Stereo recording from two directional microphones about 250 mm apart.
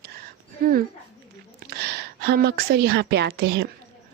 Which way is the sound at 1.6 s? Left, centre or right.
Right.